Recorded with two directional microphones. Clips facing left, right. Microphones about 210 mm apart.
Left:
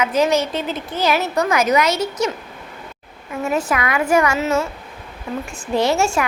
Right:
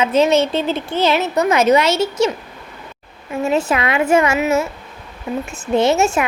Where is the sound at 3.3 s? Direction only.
25° right (ahead or behind).